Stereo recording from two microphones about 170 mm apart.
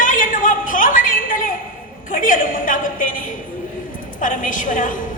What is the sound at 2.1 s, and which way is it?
A woman's voice, 55° left (ahead or behind).